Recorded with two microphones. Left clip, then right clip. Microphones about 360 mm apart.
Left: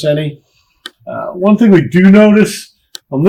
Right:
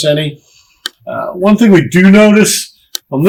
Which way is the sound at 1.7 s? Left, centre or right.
Left.